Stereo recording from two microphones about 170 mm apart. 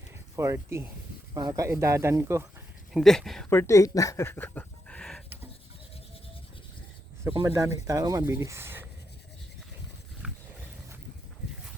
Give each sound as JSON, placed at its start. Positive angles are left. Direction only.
{"t": 0.3, "sound": "speech", "side_deg": -15}
{"t": 2.9, "sound": "speech", "side_deg": 0}
{"t": 3.5, "sound": "speech", "side_deg": 15}
{"t": 7.3, "sound": "speech", "side_deg": -20}
{"t": 10.2, "sound": "wild animals", "side_deg": -5}